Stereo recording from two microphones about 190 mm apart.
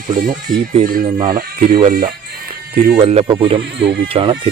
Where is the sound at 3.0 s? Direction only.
30° right (ahead or behind).